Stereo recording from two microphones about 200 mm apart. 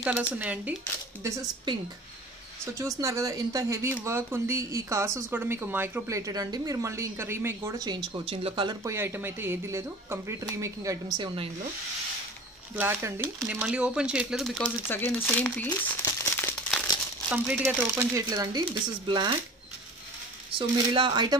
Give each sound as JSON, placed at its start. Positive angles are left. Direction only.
{"t": 0.0, "sound": "speech", "side_deg": -5}
{"t": 2.6, "sound": "speech", "side_deg": -15}
{"t": 12.7, "sound": "speech", "side_deg": -10}
{"t": 17.3, "sound": "speech", "side_deg": -5}
{"t": 18.1, "sound": "speech", "side_deg": -20}
{"t": 20.5, "sound": "speech", "side_deg": -25}